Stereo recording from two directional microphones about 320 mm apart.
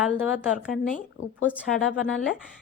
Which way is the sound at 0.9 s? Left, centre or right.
Left.